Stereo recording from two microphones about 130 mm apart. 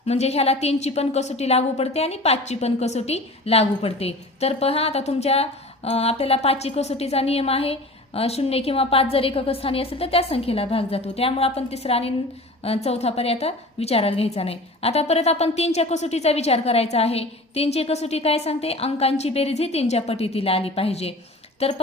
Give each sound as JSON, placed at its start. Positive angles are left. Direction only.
{"t": 0.0, "sound": "a woman's voice", "side_deg": 55}